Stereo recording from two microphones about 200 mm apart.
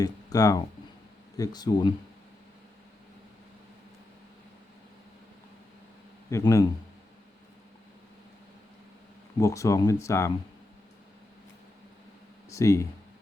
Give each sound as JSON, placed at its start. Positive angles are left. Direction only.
{"t": 0.0, "sound": "speech", "side_deg": 15}
{"t": 6.3, "sound": "speech", "side_deg": 15}
{"t": 9.4, "sound": "speech", "side_deg": 15}
{"t": 12.5, "sound": "speech", "side_deg": 15}